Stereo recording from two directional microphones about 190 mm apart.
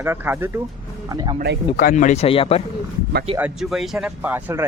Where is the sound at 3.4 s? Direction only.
Centre (ahead or behind).